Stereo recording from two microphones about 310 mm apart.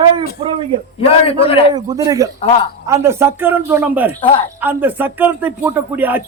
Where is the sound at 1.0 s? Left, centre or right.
Centre.